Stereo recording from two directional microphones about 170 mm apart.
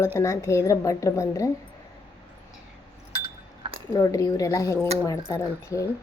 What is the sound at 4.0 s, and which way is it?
A woman's voice, 20° left (ahead or behind).